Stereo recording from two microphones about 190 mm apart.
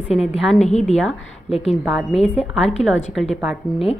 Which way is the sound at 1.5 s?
30° left (ahead or behind).